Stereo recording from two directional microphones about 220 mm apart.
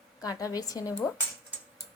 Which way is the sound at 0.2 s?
15° left (ahead or behind).